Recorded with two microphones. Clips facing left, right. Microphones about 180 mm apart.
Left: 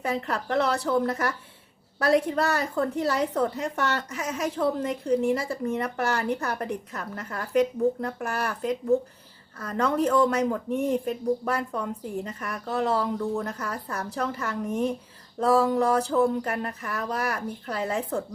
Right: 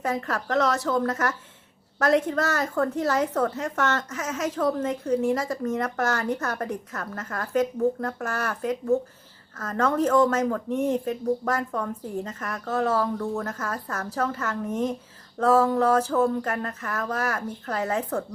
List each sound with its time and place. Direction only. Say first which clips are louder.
0.0 s a woman's voice: right 1 dB; 15° left (ahead or behind)